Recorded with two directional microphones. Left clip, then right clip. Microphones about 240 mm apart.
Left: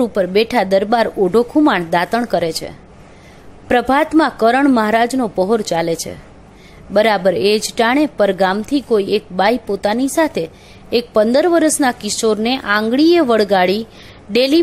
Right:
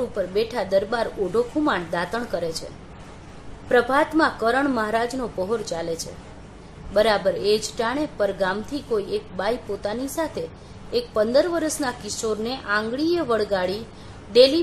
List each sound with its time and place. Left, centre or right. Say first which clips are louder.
0.1 s speech: left 10 dB; left
3.6 s speech: left 5 dB; left